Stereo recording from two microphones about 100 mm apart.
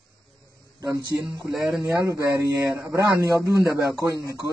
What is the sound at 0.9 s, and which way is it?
A man's voice, 35° right (ahead or behind).